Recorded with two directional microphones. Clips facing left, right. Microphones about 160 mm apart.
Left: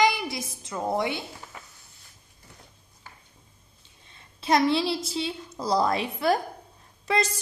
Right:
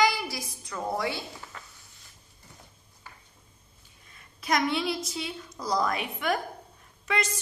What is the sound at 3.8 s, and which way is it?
A woman's voice, 25° left (ahead or behind).